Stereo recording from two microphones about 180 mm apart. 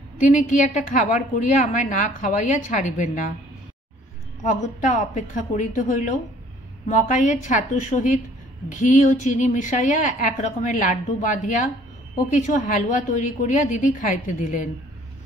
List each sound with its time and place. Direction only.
0.2 s a woman's voice: 45° left (ahead or behind)
4.5 s a woman's voice: 40° left (ahead or behind)